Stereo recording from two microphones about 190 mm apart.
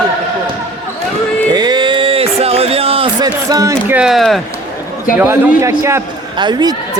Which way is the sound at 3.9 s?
Centre (ahead or behind).